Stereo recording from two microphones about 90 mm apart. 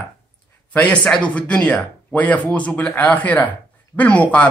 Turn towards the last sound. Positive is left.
turn(degrees=15)  # may be behind; listen again after turning